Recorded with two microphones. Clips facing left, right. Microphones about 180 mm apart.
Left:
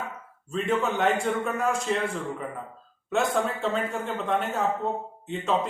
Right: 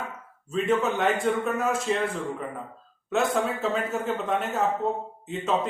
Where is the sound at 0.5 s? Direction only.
Centre (ahead or behind).